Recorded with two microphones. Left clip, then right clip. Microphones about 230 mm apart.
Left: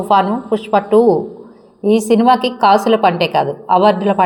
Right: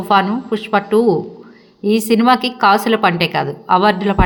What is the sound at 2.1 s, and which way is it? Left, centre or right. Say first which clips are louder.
A woman's voice: left 1 dB; centre.